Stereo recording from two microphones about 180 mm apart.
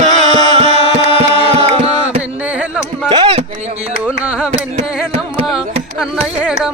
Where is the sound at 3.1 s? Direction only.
30° right (ahead or behind).